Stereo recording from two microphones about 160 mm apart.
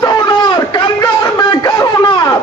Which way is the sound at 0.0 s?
25° left (ahead or behind).